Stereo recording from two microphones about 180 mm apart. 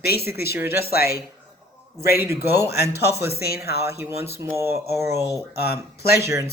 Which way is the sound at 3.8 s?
15° right (ahead or behind).